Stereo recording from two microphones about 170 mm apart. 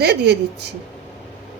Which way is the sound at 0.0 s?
75° right (ahead or behind).